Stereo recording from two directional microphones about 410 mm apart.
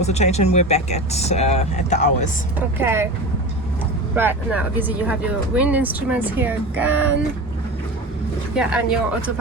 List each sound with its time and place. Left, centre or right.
0.0 s speech: centre
2.6 s speech: centre
4.1 s speech: centre
8.5 s speech: centre